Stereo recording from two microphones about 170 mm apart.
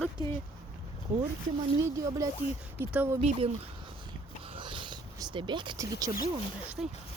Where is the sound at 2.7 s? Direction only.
10° right (ahead or behind).